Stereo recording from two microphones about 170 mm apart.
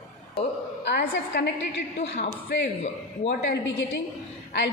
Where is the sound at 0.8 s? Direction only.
90° left.